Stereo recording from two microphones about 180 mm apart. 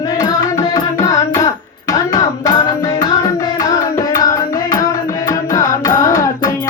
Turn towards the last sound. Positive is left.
turn(degrees=20)  # may be behind; listen again after turning